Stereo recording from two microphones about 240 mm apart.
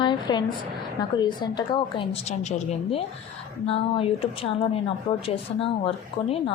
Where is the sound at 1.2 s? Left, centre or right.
Centre.